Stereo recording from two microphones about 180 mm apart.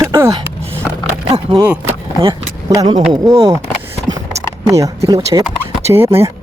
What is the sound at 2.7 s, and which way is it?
Speech, 20° right (ahead or behind).